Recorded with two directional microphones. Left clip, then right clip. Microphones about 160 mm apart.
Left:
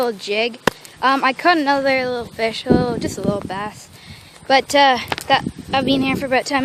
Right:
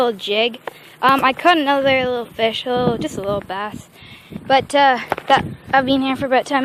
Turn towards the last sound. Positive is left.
turn(degrees=10)  # may be behind; listen again after turning